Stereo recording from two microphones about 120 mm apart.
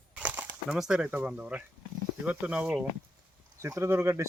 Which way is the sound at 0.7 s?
5° right (ahead or behind).